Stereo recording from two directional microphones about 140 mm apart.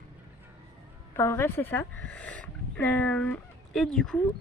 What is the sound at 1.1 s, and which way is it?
Speech, 20° left (ahead or behind).